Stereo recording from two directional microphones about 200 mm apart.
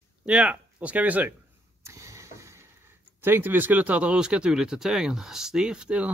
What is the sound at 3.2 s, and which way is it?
Speech, 10° right (ahead or behind).